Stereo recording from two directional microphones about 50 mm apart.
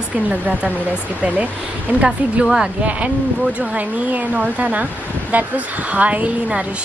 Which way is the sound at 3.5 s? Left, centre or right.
Right.